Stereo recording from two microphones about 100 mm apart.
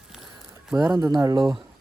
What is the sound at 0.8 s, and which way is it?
Speech, 45° right (ahead or behind).